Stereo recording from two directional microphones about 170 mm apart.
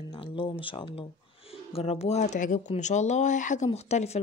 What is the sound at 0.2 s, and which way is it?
Speech, 30° left (ahead or behind).